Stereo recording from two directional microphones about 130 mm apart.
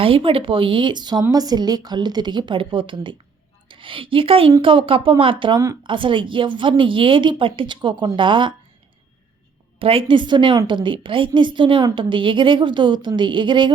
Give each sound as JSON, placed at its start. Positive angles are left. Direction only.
{"t": 0.0, "sound": "a woman's voice", "side_deg": -45}
{"t": 9.7, "sound": "a woman's voice", "side_deg": -45}